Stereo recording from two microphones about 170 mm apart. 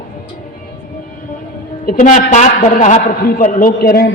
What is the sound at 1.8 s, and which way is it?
A man's voice, 55° left (ahead or behind).